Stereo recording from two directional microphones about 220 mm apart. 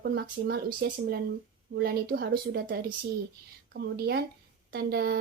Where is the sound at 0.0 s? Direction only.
45° right (ahead or behind).